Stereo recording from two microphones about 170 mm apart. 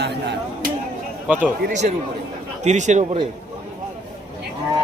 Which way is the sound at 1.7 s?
45° right (ahead or behind).